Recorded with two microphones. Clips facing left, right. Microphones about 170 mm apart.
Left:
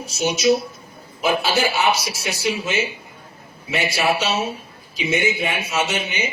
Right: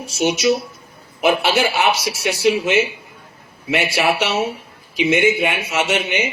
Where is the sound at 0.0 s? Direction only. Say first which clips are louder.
Right 2 dB; 70° right (ahead or behind).